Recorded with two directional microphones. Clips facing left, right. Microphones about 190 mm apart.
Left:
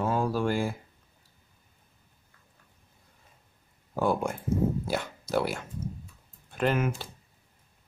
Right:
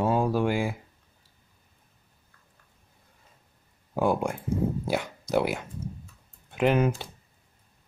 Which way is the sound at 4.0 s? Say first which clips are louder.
Right 2 dB; 15° right (ahead or behind).